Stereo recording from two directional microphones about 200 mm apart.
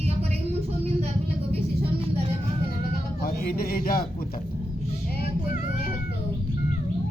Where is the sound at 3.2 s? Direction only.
50° left (ahead or behind).